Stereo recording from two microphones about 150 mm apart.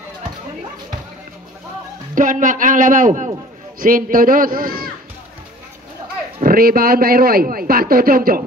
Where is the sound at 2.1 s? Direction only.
60° right (ahead or behind).